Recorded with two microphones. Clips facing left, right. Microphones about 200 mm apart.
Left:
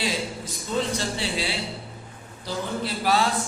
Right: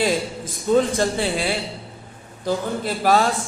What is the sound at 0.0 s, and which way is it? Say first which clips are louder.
A man's voice: right 7 dB; 50° right (ahead or behind).